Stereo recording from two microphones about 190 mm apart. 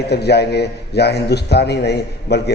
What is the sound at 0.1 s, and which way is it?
A man's voice, 60° left (ahead or behind).